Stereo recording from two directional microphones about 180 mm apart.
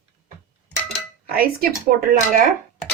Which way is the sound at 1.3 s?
55° right (ahead or behind).